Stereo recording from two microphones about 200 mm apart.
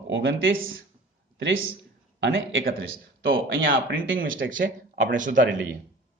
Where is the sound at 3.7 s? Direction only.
45° right (ahead or behind).